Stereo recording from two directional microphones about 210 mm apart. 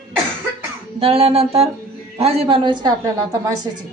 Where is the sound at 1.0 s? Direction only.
25° right (ahead or behind).